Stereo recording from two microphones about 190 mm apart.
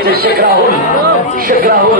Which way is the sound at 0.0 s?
55° right (ahead or behind).